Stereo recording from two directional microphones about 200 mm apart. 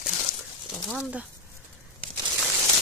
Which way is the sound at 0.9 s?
5° right (ahead or behind).